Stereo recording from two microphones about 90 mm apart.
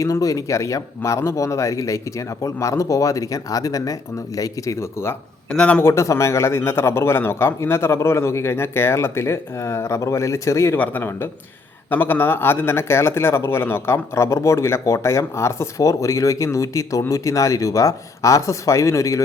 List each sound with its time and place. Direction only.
0.0 s speech: 40° left (ahead or behind)
5.5 s a man's voice: 10° left (ahead or behind)
5.8 s a man's voice: 35° left (ahead or behind)
10.8 s a man's voice: 25° left (ahead or behind)